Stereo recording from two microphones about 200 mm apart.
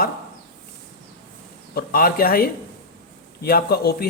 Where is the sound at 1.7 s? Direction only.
50° left (ahead or behind).